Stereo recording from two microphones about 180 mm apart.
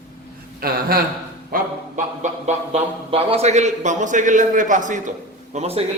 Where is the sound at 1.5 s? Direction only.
45° right (ahead or behind).